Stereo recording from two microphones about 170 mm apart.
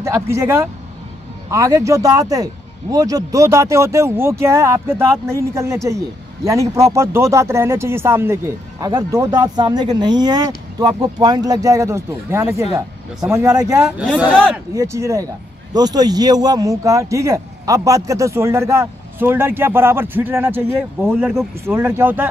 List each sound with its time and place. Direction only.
0.0 s a man's voice: 15° right (ahead or behind)
13.8 s a man's voice: 5° right (ahead or behind)
14.7 s a man's voice: 20° right (ahead or behind)